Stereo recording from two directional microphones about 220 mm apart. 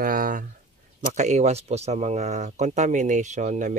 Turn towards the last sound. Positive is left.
turn(degrees=-35)  # may be behind; listen again after turning